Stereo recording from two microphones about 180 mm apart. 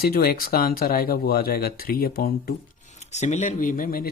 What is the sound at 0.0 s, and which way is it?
Speech, 60° left (ahead or behind).